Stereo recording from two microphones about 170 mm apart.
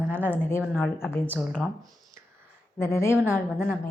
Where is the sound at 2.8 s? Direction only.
15° left (ahead or behind).